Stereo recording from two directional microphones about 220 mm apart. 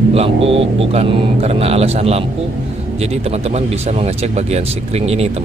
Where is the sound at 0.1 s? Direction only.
25° right (ahead or behind).